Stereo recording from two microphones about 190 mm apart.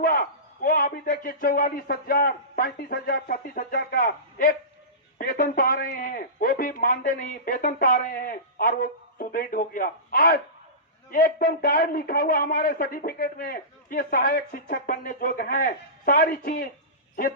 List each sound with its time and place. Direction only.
0.0 s a man's voice: 50° left (ahead or behind)